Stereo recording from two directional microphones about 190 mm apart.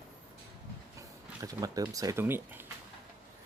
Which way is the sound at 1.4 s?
20° right (ahead or behind).